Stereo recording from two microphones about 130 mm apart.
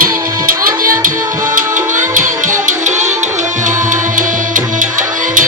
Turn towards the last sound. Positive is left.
turn(degrees=-85)